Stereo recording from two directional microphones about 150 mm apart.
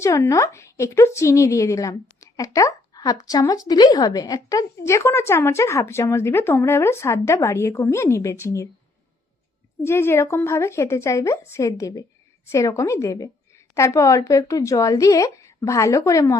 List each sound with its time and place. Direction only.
0.0 s speech: 20° left (ahead or behind)
9.8 s speech: 15° left (ahead or behind)